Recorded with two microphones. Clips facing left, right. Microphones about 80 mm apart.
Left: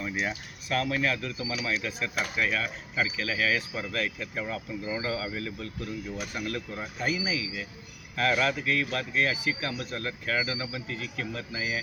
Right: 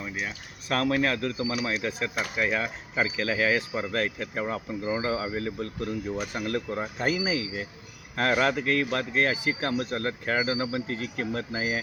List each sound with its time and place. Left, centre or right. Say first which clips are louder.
0.7 s speech: right 3 dB; right
2.1 s speech: right 1 dB; centre
2.5 s speech: right 2 dB; right